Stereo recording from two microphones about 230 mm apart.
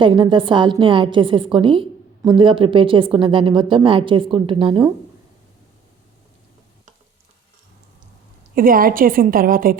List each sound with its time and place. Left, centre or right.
0.0 s a woman's voice: right
8.5 s a woman's voice: right